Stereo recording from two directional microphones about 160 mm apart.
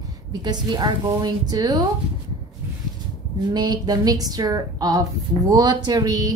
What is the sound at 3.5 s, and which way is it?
A woman's voice, 25° right (ahead or behind).